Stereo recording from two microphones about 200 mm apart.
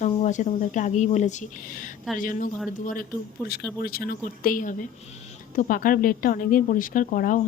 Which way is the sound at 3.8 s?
50° left (ahead or behind).